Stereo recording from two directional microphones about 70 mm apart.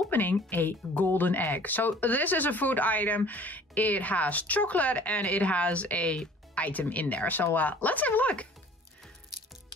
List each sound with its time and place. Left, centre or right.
0.1 s speech: left